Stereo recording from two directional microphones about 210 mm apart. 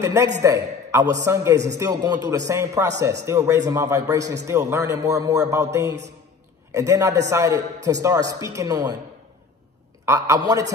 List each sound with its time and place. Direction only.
0.0 s a man's voice: 15° right (ahead or behind)
10.0 s a man's voice: 15° right (ahead or behind)